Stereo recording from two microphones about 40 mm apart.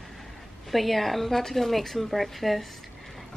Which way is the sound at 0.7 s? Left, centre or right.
Centre.